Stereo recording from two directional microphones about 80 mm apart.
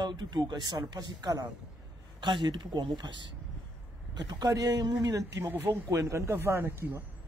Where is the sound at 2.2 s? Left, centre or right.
Right.